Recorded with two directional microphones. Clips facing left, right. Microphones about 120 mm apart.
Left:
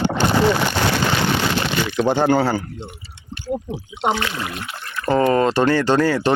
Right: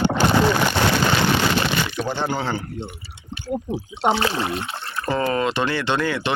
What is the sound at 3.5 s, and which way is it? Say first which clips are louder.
Speech: left 2 dB; 5° right (ahead or behind).